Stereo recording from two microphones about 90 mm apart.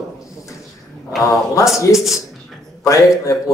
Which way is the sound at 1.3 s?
35° left (ahead or behind).